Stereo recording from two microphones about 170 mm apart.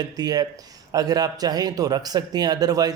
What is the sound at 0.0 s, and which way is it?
A man's voice, 25° right (ahead or behind).